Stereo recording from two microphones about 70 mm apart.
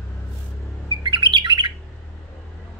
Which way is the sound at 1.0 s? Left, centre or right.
Right.